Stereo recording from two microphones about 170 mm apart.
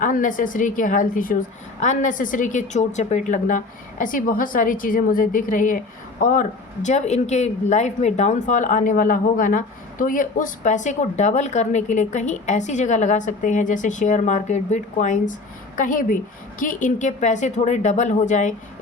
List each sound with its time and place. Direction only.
0.0 s a woman's voice: 50° left (ahead or behind)